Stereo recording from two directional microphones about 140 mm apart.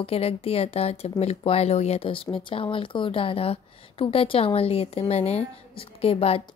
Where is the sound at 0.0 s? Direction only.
45° left (ahead or behind).